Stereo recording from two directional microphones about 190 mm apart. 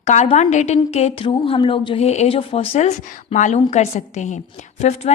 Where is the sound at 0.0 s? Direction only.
35° left (ahead or behind).